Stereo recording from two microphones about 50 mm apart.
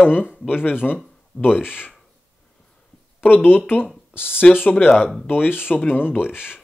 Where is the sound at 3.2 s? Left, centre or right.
Left.